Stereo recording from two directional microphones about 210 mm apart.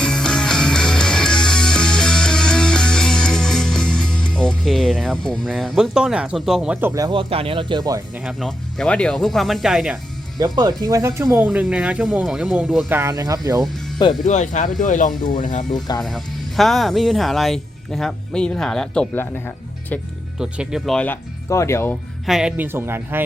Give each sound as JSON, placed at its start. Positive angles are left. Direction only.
{"t": 0.0, "sound": "music", "side_deg": 5}
{"t": 8.2, "sound": "speech", "side_deg": 0}
{"t": 10.4, "sound": "speech", "side_deg": -20}
{"t": 13.0, "sound": "speech", "side_deg": -15}
{"t": 14.3, "sound": "speech", "side_deg": 35}
{"t": 16.0, "sound": "speech", "side_deg": 0}
{"t": 20.4, "sound": "speech", "side_deg": -5}
{"t": 22.3, "sound": "speech", "side_deg": -5}